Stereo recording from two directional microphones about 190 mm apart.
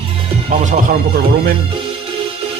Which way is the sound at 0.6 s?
40° right (ahead or behind).